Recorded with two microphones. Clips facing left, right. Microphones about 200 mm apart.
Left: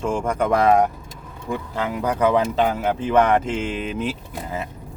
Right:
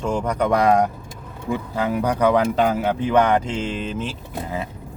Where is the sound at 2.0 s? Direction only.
Centre (ahead or behind).